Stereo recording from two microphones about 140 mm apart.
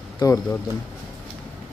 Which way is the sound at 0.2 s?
30° left (ahead or behind).